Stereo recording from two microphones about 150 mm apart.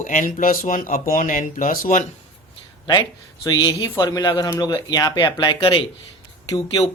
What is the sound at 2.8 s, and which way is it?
A man's voice, 30° left (ahead or behind).